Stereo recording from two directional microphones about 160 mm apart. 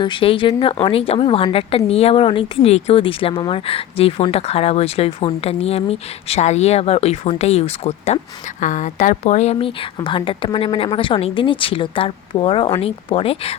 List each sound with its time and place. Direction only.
0.0 s a woman's voice: 30° left (ahead or behind)